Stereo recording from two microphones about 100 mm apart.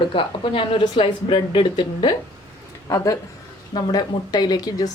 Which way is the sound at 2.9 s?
30° left (ahead or behind).